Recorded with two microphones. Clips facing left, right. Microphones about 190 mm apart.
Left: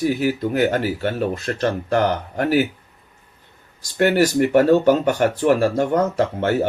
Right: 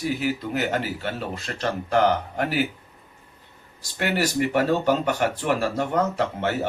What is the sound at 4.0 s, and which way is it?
Speech, 50° left (ahead or behind).